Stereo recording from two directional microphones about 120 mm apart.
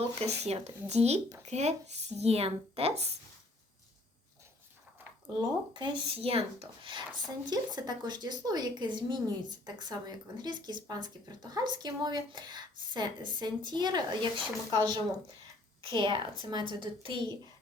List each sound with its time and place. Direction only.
0.0 s speech: 60° right (ahead or behind)
5.4 s speech: 40° right (ahead or behind)
15.9 s a child's voice: 40° right (ahead or behind)